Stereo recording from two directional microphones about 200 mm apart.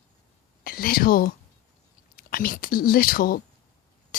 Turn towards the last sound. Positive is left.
turn(degrees=45)  # may be behind; listen again after turning